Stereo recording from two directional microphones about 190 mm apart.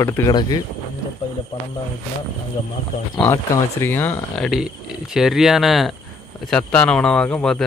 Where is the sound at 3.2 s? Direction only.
15° left (ahead or behind).